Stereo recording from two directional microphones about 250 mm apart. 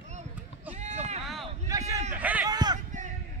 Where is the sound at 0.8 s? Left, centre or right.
Right.